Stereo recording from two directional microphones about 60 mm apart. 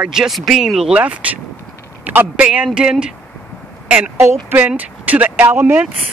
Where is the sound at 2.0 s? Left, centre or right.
Right.